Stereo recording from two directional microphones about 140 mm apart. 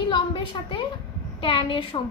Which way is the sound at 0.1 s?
35° left (ahead or behind).